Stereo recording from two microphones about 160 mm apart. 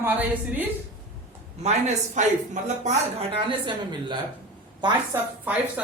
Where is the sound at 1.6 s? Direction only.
45° right (ahead or behind).